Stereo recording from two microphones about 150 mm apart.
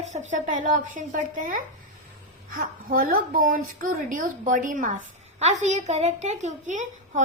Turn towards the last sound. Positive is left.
turn(degrees=-55)  # may be behind; listen again after turning